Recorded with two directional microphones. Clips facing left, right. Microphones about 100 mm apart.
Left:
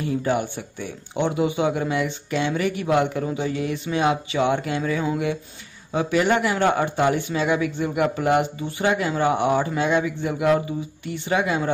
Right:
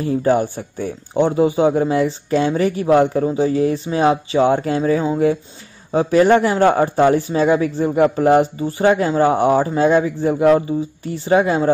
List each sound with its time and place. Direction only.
0.0 s speech: 40° right (ahead or behind)